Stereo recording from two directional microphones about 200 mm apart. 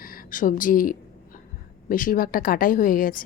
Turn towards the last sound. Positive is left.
turn(degrees=45)  # may be behind; listen again after turning